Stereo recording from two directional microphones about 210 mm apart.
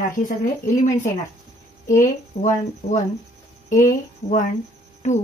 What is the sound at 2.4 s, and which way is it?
Speech, 35° left (ahead or behind).